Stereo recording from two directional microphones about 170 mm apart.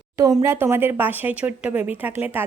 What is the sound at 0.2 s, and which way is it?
Speech, 20° right (ahead or behind).